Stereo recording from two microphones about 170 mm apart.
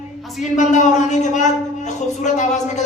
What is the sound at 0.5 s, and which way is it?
A man's voice, 45° left (ahead or behind).